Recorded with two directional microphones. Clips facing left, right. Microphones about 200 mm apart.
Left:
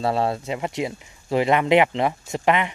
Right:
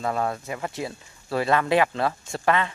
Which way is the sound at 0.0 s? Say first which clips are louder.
Left 4 dB; 25° left (ahead or behind).